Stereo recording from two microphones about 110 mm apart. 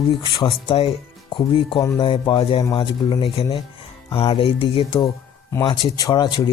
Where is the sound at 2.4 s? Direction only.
55° left (ahead or behind).